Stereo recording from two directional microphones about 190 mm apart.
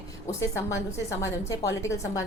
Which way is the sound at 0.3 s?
15° left (ahead or behind).